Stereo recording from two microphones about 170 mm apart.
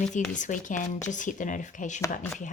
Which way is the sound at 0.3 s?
50° left (ahead or behind).